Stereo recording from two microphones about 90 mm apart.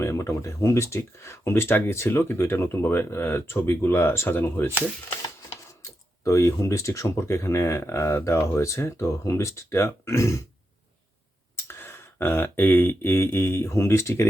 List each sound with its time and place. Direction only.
0.0 s speech: 35° left (ahead or behind)
5.8 s speech: 35° left (ahead or behind)
11.5 s a sound: 25° left (ahead or behind)